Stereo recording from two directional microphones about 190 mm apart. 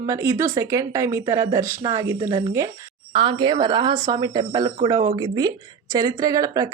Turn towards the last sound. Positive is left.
turn(degrees=-20)  # may be behind; listen again after turning